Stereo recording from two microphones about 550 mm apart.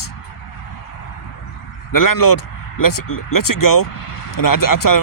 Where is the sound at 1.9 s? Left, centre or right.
Left.